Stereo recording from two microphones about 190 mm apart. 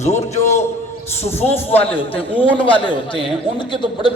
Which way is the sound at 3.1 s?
25° left (ahead or behind).